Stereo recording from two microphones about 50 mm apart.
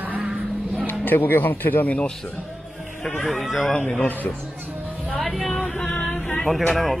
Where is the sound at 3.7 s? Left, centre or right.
Centre.